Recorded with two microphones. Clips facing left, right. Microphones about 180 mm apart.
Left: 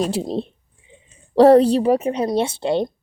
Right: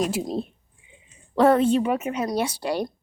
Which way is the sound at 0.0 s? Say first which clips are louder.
Left 3 dB; 30° left (ahead or behind).